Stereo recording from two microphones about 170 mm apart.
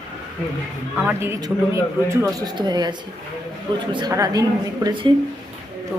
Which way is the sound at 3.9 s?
25° right (ahead or behind).